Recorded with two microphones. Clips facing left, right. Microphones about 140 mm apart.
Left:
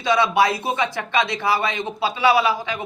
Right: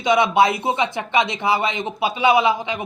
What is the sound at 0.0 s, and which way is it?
A man's voice, 20° right (ahead or behind).